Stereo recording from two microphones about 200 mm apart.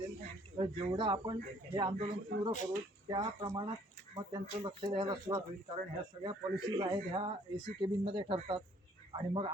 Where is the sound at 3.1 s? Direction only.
20° right (ahead or behind).